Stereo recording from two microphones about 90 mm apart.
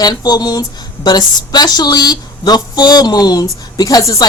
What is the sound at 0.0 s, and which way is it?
A woman's voice, 50° left (ahead or behind).